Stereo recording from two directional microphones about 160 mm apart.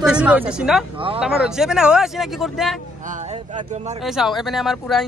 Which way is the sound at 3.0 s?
50° right (ahead or behind).